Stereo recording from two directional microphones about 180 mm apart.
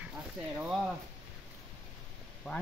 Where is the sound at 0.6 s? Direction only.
5° right (ahead or behind).